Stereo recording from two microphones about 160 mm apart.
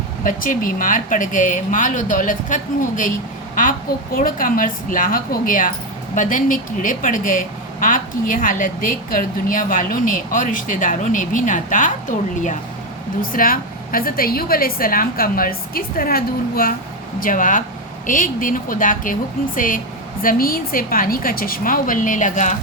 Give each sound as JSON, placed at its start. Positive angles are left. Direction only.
{"t": 0.3, "sound": "speech", "side_deg": 60}
{"t": 13.3, "sound": "a woman's voice", "side_deg": 65}